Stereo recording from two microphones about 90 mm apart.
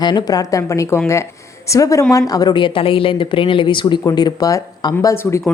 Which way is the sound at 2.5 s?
70° left (ahead or behind).